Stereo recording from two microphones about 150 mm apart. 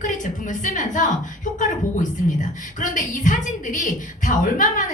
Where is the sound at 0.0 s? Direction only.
60° left (ahead or behind).